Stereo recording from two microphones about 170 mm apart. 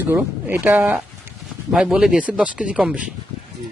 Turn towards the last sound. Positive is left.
turn(degrees=-5)  # may be behind; listen again after turning